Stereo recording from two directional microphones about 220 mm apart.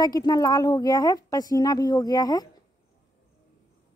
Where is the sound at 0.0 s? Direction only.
20° left (ahead or behind).